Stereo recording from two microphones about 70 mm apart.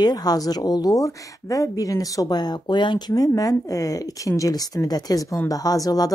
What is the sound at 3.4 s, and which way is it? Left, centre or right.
Speech, left.